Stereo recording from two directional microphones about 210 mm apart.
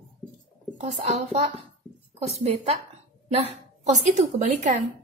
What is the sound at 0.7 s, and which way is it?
A woman's voice, 35° right (ahead or behind).